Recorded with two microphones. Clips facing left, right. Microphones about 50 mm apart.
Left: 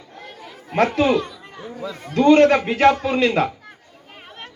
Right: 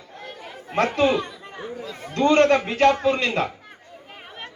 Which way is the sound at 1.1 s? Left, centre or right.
Centre.